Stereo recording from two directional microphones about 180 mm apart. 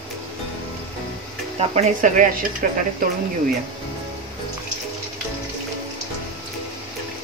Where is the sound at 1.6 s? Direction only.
40° right (ahead or behind).